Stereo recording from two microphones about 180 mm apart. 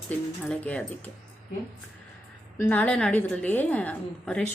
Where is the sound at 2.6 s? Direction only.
10° left (ahead or behind).